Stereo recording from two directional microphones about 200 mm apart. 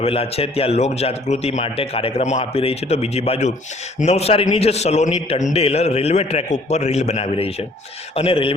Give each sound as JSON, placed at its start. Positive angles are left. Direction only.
{"t": 0.0, "sound": "a man's voice", "side_deg": 30}